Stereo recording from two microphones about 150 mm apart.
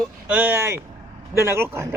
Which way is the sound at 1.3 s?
15° right (ahead or behind).